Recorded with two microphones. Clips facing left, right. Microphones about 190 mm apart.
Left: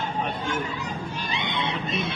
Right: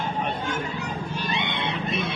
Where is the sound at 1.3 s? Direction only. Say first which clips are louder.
Even; 60° right (ahead or behind).